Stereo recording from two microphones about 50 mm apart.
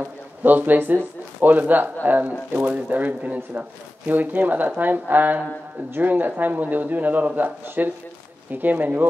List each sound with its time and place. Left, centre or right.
0.0 s a man's voice: right